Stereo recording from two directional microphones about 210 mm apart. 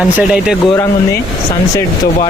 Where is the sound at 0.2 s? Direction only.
5° right (ahead or behind).